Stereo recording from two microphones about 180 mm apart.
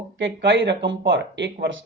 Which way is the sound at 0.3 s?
85° right.